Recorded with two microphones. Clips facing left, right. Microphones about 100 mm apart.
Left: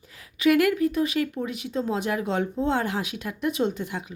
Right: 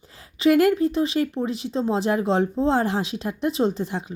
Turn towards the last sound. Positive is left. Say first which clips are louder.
# right 3 dB
turn(degrees=-30)  # may be behind; listen again after turning